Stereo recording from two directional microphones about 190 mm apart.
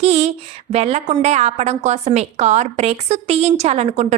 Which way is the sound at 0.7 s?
35° right (ahead or behind).